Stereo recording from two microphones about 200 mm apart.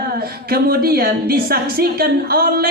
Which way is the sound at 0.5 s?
50° right (ahead or behind).